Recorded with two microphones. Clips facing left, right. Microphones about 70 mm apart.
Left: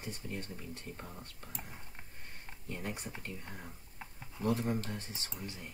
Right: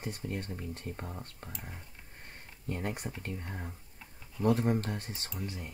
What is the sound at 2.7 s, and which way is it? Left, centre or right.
Speech, right.